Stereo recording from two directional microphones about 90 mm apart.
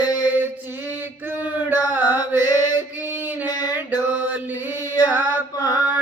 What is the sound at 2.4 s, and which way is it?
Mantra, 45° left (ahead or behind).